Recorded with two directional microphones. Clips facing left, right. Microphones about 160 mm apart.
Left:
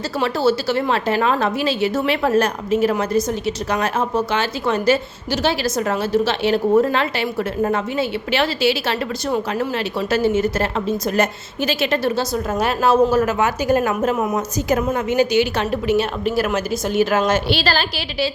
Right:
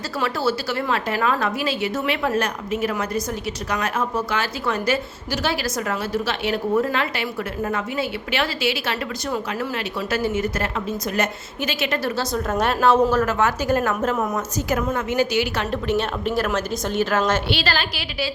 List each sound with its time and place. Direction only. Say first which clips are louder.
0.2 s a woman's voice: left 5 dB; 25° left (ahead or behind)
12.3 s a woman's voice: left 1 dB; 5° left (ahead or behind); by 15.6 s 20° left (ahead or behind)
15.7 s a woman's voice: left 4 dB; 10° left (ahead or behind)
17.5 s a woman's voice: left 4 dB; 35° left (ahead or behind)